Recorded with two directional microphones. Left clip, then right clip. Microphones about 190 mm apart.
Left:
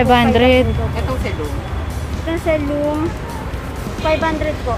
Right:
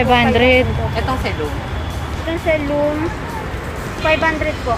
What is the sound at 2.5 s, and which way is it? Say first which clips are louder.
Speech: right 1 dB; 55° left (ahead or behind).